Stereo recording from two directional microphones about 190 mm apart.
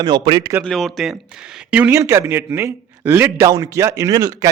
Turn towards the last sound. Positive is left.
turn(degrees=-20)  # may be behind; listen again after turning